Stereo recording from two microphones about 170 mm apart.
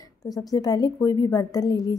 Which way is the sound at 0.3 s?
20° left (ahead or behind).